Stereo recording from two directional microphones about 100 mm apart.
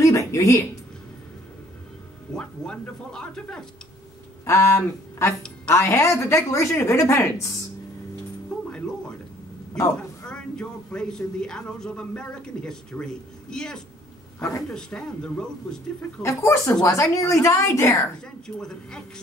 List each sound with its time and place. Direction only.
0.0 s a sound: 30° left (ahead or behind)
2.3 s speech: 10° left (ahead or behind)
4.5 s speech: 30° left (ahead or behind)
9.9 s a man's voice: 10° left (ahead or behind)
16.2 s a woman's voice: 30° left (ahead or behind)
18.2 s speech: 5° left (ahead or behind)